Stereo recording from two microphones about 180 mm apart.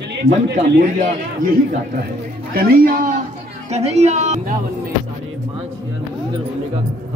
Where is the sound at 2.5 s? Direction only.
55° right (ahead or behind).